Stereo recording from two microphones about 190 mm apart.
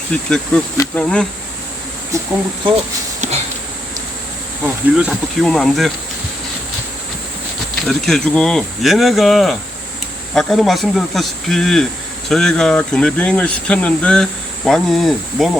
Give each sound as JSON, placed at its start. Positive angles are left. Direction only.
{"t": 0.1, "sound": "speech", "side_deg": 5}
{"t": 0.8, "sound": "insect", "side_deg": 5}
{"t": 3.2, "sound": "a sound", "side_deg": -35}
{"t": 4.6, "sound": "speech", "side_deg": -5}
{"t": 7.9, "sound": "speech", "side_deg": 0}